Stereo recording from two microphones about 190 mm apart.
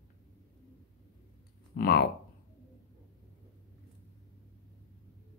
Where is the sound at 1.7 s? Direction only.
50° left (ahead or behind).